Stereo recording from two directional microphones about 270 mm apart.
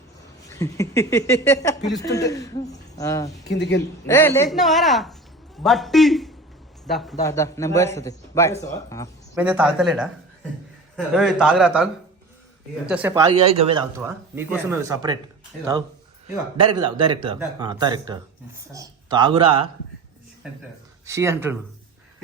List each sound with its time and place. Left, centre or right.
0.5 s a man's voice: centre
3.5 s a woman's voice: left
4.0 s speech: centre
7.2 s a man's voice: centre
9.3 s speech: centre
13.4 s a man's voice: right
14.7 s speech: centre
16.6 s speech: centre
21.1 s speech: centre